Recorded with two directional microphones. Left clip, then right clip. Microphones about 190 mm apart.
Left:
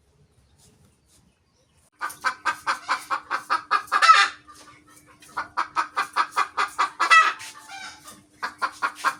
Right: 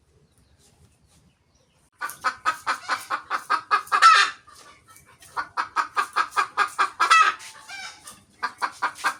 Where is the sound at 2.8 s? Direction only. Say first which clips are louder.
Left 1 dB; 10° right (ahead or behind).